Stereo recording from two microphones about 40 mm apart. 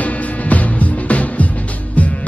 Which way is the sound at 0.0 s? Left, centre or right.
Left.